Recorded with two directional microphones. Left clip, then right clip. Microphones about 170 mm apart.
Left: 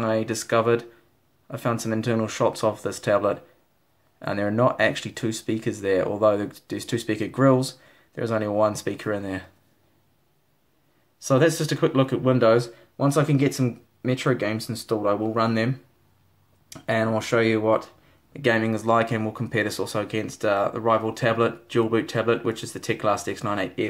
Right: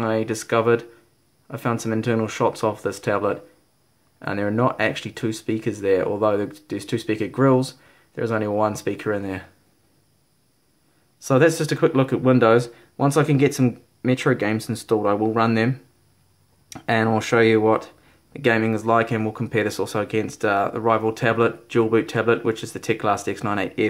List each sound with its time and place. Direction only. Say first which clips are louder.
0.0 s speech: right 1 dB; centre (ahead or behind)
11.2 s speech: right 3 dB; 10° right (ahead or behind)
16.7 s speech: right 3 dB; 15° right (ahead or behind)